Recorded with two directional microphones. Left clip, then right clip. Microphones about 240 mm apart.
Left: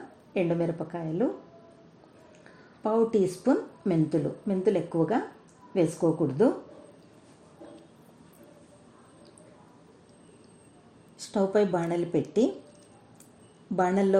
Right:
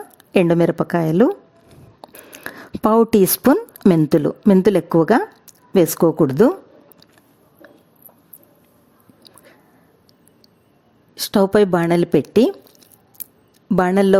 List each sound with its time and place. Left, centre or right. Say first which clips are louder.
0.3 s a woman's voice: right 13 dB; right
2.4 s a woman's voice: right 13 dB; right
11.2 s a woman's voice: right 10 dB; right
13.7 s a woman's voice: right 9 dB; right